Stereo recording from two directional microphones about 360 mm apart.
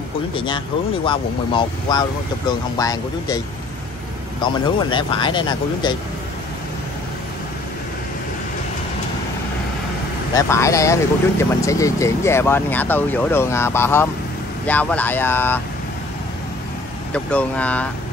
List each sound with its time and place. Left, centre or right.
0.3 s speech: centre
10.3 s speech: centre
17.1 s speech: centre